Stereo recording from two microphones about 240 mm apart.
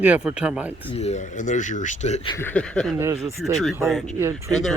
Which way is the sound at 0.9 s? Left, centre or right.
Left.